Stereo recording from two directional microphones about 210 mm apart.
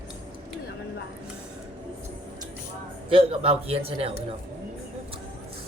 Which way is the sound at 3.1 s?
25° right (ahead or behind).